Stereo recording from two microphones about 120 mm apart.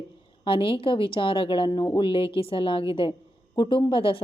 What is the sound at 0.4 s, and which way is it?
Speech, 50° left (ahead or behind).